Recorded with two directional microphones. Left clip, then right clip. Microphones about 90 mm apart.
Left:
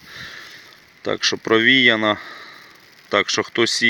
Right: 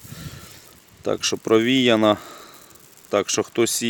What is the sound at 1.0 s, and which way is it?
Speech, 25° right (ahead or behind).